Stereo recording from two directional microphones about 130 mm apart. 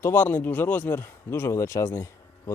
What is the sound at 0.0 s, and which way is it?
Speech, 15° left (ahead or behind).